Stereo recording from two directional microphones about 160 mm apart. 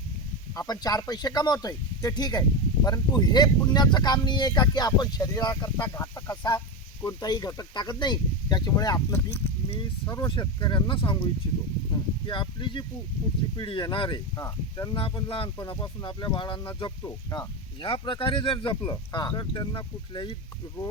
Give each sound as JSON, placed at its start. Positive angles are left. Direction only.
{"t": 0.5, "sound": "speech", "side_deg": 20}
{"t": 17.8, "sound": "speech", "side_deg": 30}